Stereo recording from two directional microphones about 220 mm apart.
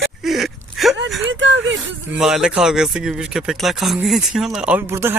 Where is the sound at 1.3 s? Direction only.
55° right (ahead or behind).